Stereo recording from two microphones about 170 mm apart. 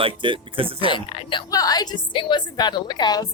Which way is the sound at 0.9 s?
30° left (ahead or behind).